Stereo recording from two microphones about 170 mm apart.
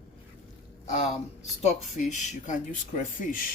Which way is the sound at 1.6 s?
40° left (ahead or behind).